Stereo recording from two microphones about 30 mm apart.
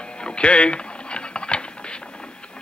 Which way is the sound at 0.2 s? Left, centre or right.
Left.